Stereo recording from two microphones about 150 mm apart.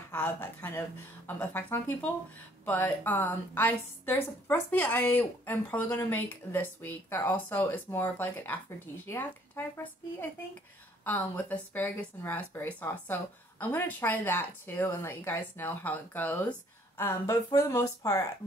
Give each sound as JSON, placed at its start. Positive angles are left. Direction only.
{"t": 0.1, "sound": "a woman's voice", "side_deg": 10}
{"t": 11.1, "sound": "a woman's voice", "side_deg": 10}